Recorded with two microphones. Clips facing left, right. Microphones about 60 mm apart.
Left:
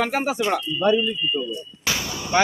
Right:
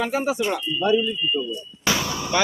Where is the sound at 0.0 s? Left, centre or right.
Left.